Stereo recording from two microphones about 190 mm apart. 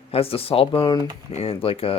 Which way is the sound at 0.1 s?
30° left (ahead or behind).